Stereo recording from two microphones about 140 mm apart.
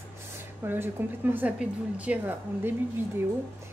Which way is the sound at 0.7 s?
15° right (ahead or behind).